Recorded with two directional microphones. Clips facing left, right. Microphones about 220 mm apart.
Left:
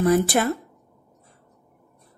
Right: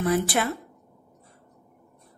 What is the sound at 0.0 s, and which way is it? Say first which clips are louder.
Speech: left 5 dB; 40° left (ahead or behind).